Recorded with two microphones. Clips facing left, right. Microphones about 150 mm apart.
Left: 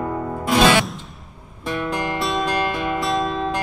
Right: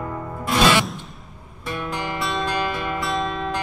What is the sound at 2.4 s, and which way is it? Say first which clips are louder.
Music: left 3 dB; 40° left (ahead or behind).